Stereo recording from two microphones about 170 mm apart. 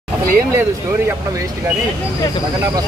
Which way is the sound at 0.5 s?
15° right (ahead or behind).